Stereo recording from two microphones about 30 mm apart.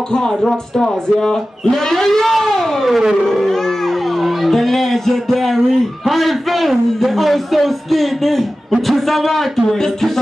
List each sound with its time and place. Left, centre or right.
0.7 s speech: centre
4.2 s a sound: centre
6.0 s a man's voice: centre